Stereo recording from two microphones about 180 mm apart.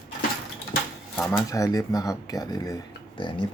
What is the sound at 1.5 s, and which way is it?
Speech, 20° left (ahead or behind).